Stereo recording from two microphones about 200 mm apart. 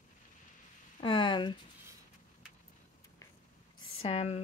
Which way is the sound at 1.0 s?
25° left (ahead or behind).